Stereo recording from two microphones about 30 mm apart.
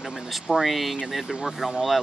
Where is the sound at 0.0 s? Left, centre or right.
Centre.